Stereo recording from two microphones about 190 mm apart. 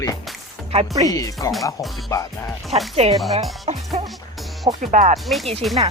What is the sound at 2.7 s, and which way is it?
Speech, centre (ahead or behind).